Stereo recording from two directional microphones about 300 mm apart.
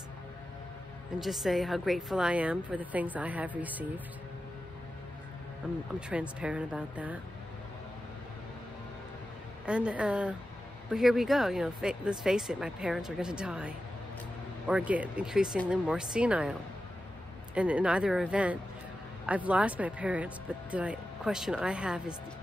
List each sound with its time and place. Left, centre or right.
1.2 s speech: centre
5.6 s speech: centre
9.7 s speech: centre
17.6 s speech: centre